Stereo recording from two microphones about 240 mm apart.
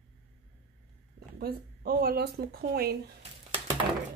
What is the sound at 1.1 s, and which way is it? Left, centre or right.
Speech, right.